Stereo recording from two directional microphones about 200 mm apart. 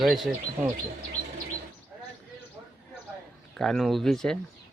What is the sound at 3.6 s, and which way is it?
Speech, centre (ahead or behind).